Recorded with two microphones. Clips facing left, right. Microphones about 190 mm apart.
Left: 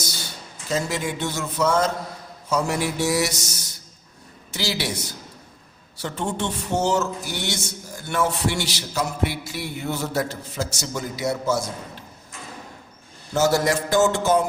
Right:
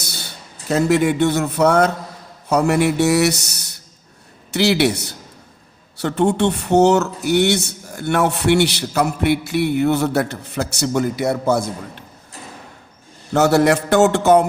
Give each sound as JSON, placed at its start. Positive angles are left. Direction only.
{"t": 0.0, "sound": "a sound", "side_deg": -60}
{"t": 0.7, "sound": "speech", "side_deg": -65}
{"t": 13.3, "sound": "speech", "side_deg": -65}